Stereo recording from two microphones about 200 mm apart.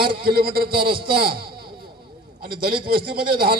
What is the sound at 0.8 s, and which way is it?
Speech, 25° right (ahead or behind).